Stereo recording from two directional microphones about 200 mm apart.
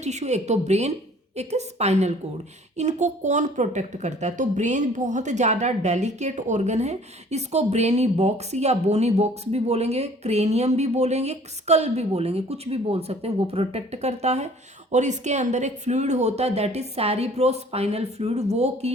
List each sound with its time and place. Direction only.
0.0 s speech: 35° right (ahead or behind)